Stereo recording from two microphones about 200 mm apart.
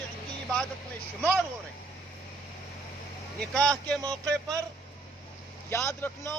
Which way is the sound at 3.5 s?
5° left (ahead or behind).